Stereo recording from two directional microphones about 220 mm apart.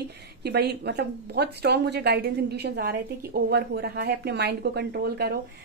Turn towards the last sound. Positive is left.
turn(degrees=-45)  # may be behind; listen again after turning